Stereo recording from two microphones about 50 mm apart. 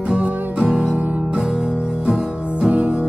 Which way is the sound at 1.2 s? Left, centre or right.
Centre.